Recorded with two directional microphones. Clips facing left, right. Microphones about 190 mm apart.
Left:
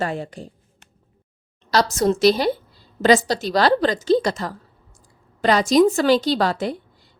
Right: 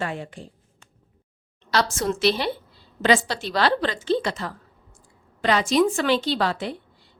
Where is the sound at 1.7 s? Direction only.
40° left (ahead or behind).